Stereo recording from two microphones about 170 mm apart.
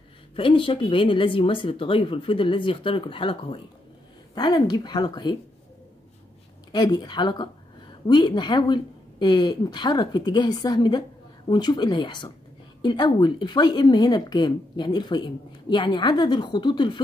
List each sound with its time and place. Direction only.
0.4 s speech: 30° left (ahead or behind)
6.7 s speech: 25° left (ahead or behind)